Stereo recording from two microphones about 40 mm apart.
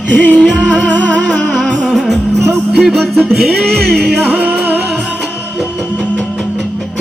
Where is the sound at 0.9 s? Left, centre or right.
Left.